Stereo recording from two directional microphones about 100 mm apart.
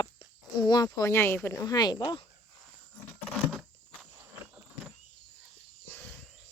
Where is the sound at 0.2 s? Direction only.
45° left (ahead or behind).